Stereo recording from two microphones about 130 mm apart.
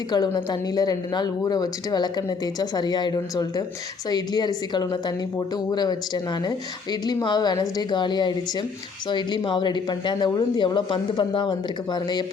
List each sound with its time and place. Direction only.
0.1 s a woman's voice: 30° left (ahead or behind)
7.0 s a woman's voice: 30° left (ahead or behind)